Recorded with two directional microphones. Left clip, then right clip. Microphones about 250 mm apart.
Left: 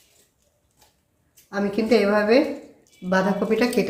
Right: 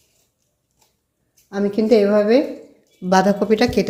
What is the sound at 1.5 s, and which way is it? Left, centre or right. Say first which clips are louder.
A woman's voice: right 5 dB; right.